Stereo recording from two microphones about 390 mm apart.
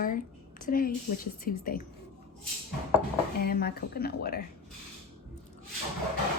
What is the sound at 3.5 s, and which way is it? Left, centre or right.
Speech, left.